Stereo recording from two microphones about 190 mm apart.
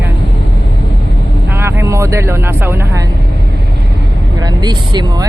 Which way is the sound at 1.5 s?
15° right (ahead or behind).